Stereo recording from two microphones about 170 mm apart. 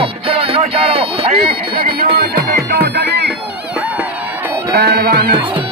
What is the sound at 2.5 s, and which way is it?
Music, 70° right (ahead or behind).